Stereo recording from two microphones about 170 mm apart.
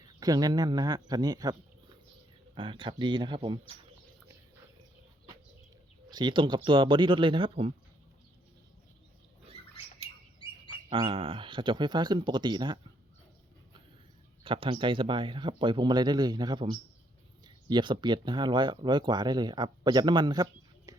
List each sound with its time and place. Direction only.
0.2 s speech: 20° right (ahead or behind)
6.1 s speech: 25° right (ahead or behind)
10.8 s speech: 30° right (ahead or behind)
14.4 s speech: 30° right (ahead or behind)